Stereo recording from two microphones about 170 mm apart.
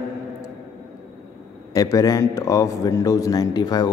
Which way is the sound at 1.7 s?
20° left (ahead or behind).